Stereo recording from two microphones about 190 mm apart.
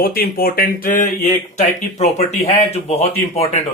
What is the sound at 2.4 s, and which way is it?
Speech, 35° left (ahead or behind).